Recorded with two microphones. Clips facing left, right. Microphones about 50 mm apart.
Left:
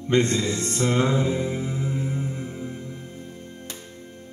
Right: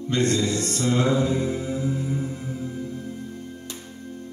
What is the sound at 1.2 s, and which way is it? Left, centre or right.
Music, centre.